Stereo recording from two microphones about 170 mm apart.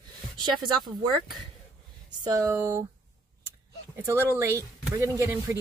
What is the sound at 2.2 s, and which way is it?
Speech, 20° right (ahead or behind).